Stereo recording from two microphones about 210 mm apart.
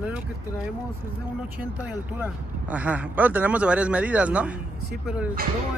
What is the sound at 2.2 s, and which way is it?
Speech, 5° right (ahead or behind).